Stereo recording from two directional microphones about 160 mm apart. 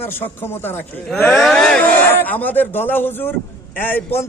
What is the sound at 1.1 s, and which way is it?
Speech, centre (ahead or behind).